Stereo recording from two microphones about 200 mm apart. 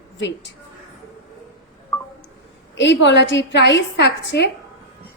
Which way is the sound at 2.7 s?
60° left (ahead or behind).